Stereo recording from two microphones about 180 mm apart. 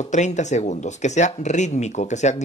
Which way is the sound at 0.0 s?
40° left (ahead or behind).